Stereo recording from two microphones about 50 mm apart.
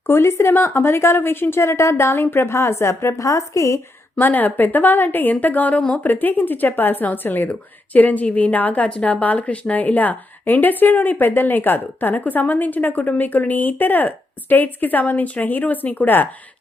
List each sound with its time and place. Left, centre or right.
0.1 s a woman's voice: left
0.5 s a woman's voice: left
4.2 s a woman's voice: left